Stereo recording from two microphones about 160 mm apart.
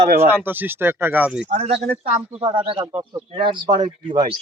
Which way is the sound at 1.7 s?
90° right.